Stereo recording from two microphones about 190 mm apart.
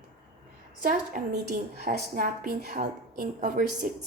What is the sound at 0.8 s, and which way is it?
A woman's voice, 45° right (ahead or behind).